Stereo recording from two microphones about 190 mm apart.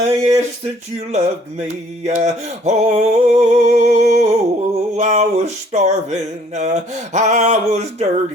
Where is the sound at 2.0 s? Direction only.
35° right (ahead or behind).